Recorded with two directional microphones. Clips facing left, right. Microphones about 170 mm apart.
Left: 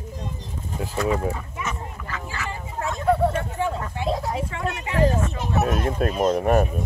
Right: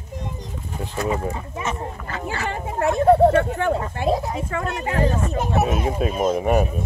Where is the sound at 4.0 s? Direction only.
45° right (ahead or behind).